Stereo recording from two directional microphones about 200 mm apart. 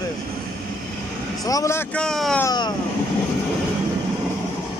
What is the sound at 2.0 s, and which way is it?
Mantra, 5° left (ahead or behind).